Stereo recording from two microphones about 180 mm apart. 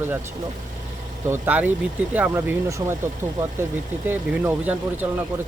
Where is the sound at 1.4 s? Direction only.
10° right (ahead or behind).